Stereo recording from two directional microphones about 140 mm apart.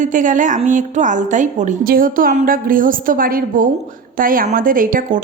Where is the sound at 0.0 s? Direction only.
65° right (ahead or behind).